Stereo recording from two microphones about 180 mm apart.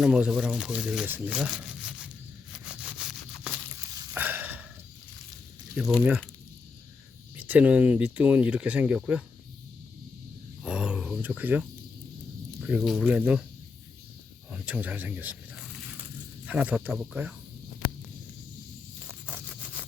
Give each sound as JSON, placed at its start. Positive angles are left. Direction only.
{"t": 0.0, "sound": "speech", "side_deg": -5}
{"t": 3.8, "sound": "a sound", "side_deg": -15}
{"t": 5.7, "sound": "speech", "side_deg": 0}
{"t": 7.3, "sound": "speech", "side_deg": -10}
{"t": 10.6, "sound": "speech", "side_deg": -5}
{"t": 14.5, "sound": "speech", "side_deg": -10}
{"t": 19.0, "sound": "a sound", "side_deg": -5}